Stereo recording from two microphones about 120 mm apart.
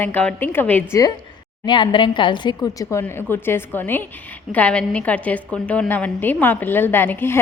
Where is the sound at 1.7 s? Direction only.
40° left (ahead or behind).